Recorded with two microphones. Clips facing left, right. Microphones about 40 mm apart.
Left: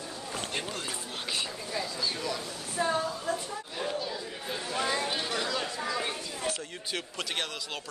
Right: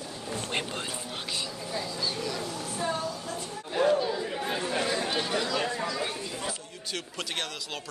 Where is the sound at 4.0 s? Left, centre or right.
Centre.